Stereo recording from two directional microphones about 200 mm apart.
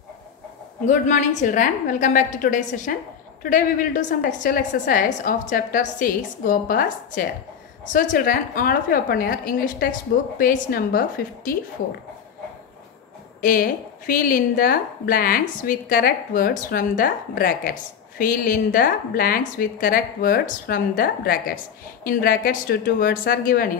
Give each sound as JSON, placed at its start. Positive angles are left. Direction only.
{"t": 0.8, "sound": "a woman's voice", "side_deg": 35}
{"t": 13.4, "sound": "a woman's voice", "side_deg": 45}